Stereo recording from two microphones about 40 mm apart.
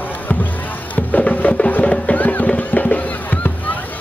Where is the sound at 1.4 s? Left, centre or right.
Left.